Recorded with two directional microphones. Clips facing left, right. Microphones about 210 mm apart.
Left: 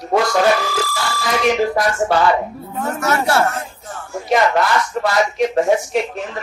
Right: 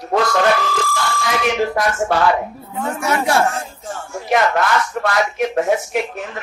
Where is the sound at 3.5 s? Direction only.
30° right (ahead or behind).